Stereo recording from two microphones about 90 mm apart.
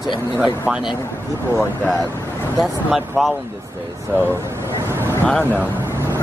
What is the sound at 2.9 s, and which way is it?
Speech, centre (ahead or behind).